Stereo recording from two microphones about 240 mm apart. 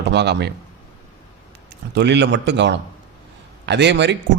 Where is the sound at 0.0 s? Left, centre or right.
Right.